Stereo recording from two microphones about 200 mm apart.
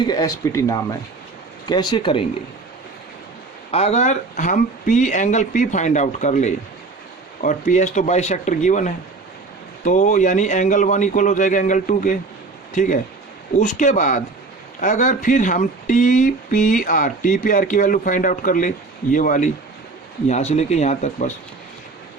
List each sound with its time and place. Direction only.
0.0 s speech: 20° left (ahead or behind)
3.7 s speech: 30° left (ahead or behind)